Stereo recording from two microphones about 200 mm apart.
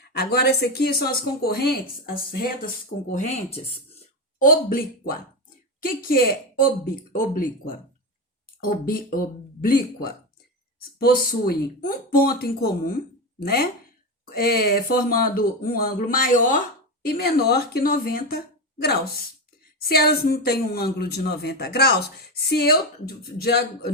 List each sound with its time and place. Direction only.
0.1 s a woman's voice: 55° left (ahead or behind)
3.1 s speech: 35° left (ahead or behind)
4.4 s a woman's voice: 45° left (ahead or behind)